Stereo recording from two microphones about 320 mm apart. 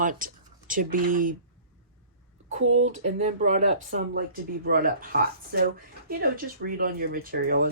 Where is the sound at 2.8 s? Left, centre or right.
Right.